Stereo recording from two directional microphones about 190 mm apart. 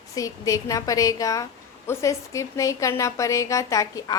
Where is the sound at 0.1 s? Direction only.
20° left (ahead or behind).